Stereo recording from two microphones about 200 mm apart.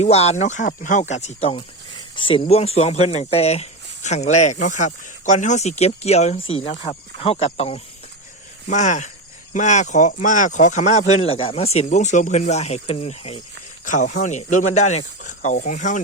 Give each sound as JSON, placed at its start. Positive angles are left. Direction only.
{"t": 0.0, "sound": "speech", "side_deg": 30}